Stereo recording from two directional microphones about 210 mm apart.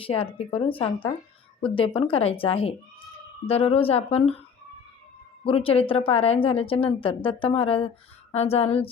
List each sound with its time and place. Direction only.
0.0 s a woman's voice: 25° left (ahead or behind)
5.5 s a woman's voice: 25° left (ahead or behind)